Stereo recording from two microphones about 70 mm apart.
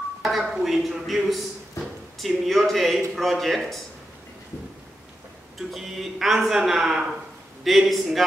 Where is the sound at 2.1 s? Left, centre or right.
Centre.